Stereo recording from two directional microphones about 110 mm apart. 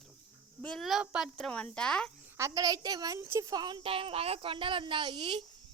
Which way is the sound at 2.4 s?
30° right (ahead or behind).